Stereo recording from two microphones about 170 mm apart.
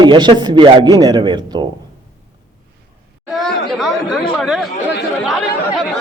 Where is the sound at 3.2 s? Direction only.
Centre (ahead or behind).